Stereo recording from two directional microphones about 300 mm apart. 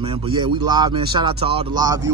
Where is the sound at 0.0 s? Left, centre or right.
Centre.